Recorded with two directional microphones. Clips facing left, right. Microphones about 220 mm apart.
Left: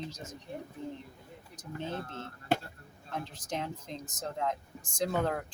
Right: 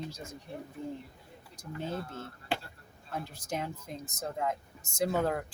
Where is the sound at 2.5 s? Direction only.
45° left (ahead or behind).